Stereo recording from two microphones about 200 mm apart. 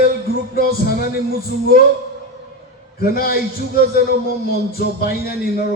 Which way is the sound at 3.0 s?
45° left (ahead or behind).